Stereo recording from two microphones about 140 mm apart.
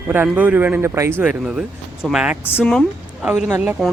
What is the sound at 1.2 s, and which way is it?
Speech, 5° right (ahead or behind).